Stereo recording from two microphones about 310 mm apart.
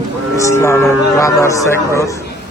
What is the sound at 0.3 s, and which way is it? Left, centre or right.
Speech, centre.